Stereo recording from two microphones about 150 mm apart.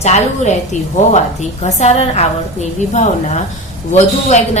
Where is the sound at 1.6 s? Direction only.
45° left (ahead or behind).